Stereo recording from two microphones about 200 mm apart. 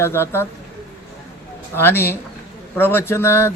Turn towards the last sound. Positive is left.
turn(degrees=10)  # may be behind; listen again after turning